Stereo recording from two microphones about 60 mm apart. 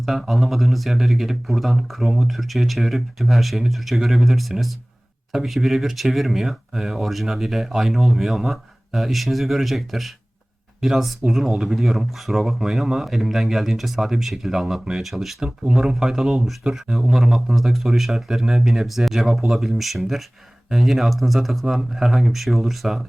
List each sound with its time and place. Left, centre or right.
0.0 s speech: centre
15.4 s speech: centre
15.8 s speech: centre